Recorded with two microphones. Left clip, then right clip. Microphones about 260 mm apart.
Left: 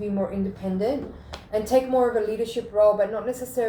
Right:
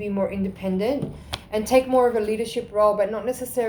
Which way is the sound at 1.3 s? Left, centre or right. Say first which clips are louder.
Right 2 dB; right.